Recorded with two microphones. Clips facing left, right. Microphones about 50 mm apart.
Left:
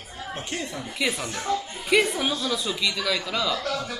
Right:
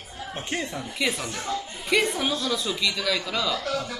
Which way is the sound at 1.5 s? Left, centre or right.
Left.